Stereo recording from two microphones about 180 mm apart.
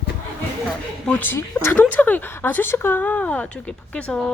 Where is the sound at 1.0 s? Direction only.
10° left (ahead or behind).